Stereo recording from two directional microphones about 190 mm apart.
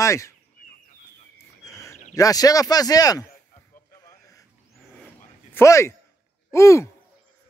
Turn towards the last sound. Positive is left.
turn(degrees=15)  # may be behind; listen again after turning